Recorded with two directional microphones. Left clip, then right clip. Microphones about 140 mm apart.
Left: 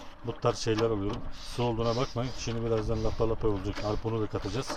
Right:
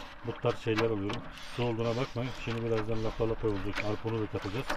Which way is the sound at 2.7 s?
Centre (ahead or behind).